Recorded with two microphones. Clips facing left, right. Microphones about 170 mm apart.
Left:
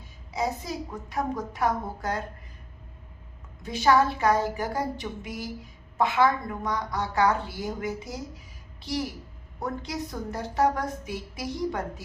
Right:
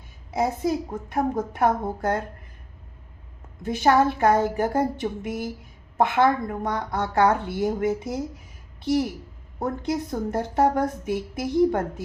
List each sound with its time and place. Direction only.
0.3 s a woman's voice: 55° right (ahead or behind)
3.6 s a woman's voice: 50° right (ahead or behind)